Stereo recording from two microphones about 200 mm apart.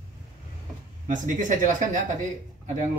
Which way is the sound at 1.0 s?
40° right (ahead or behind).